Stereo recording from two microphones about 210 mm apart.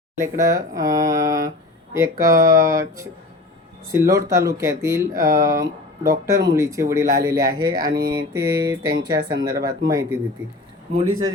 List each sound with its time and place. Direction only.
0.2 s speech: 15° right (ahead or behind)